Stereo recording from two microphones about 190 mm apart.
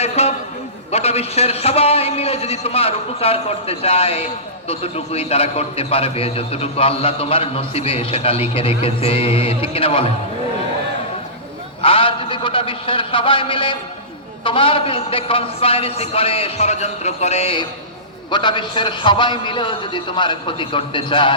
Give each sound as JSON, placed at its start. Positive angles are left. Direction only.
{"t": 0.0, "sound": "a sound", "side_deg": 35}
{"t": 0.9, "sound": "a man's voice", "side_deg": 35}
{"t": 11.8, "sound": "a man's voice", "side_deg": 30}